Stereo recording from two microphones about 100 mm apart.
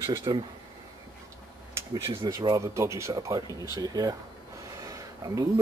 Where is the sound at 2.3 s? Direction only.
40° right (ahead or behind).